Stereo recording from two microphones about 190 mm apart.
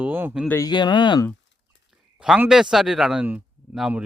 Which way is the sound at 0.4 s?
10° left (ahead or behind).